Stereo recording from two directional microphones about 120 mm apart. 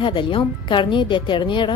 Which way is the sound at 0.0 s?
45° left (ahead or behind).